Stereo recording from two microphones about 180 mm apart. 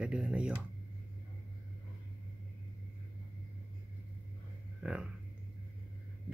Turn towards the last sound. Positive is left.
turn(degrees=-5)  # may be behind; listen again after turning